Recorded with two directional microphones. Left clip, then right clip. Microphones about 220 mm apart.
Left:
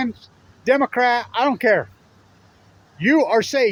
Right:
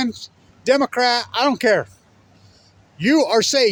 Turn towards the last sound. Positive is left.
turn(degrees=-15)  # may be behind; listen again after turning